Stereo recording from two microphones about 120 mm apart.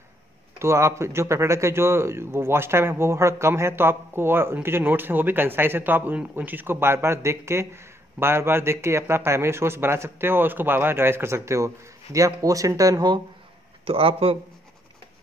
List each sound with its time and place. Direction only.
0.6 s speech: 25° right (ahead or behind)
13.8 s a man's voice: 50° right (ahead or behind)